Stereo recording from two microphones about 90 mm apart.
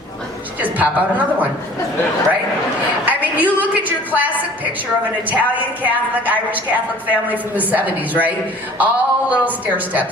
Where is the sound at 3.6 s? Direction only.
20° right (ahead or behind).